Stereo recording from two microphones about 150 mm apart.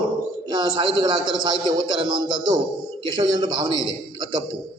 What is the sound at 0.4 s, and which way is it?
A man's voice, 30° right (ahead or behind).